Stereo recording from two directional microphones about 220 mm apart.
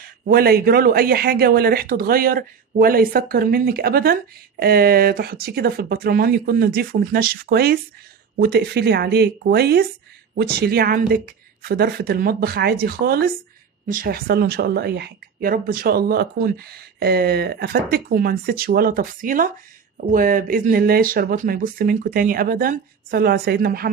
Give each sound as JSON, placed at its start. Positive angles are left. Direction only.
{"t": 0.0, "sound": "speech", "side_deg": -45}